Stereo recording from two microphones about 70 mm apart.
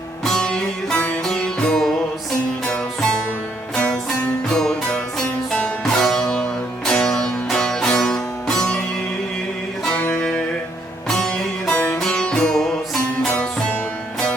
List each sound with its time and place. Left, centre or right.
0.3 s music: centre
4.4 s music: centre
10.0 s music: centre
13.2 s music: centre